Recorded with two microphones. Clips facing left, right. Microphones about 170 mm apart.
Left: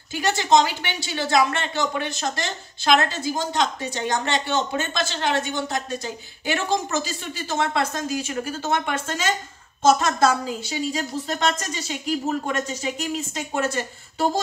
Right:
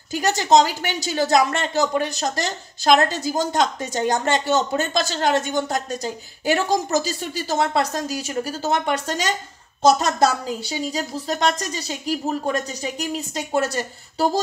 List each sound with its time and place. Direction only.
0.1 s speech: 40° right (ahead or behind)